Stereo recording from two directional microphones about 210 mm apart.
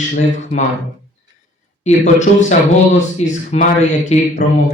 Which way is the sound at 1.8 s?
35° left (ahead or behind).